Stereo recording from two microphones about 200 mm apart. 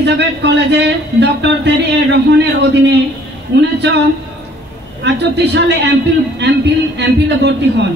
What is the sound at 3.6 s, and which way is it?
Speech, 60° right (ahead or behind).